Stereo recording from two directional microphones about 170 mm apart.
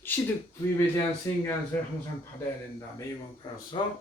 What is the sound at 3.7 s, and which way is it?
Speech, 30° left (ahead or behind).